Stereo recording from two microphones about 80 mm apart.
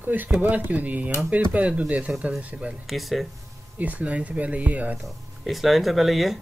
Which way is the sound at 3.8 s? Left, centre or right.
Centre.